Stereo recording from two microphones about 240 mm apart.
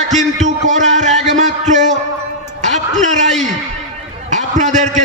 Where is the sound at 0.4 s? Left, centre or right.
Right.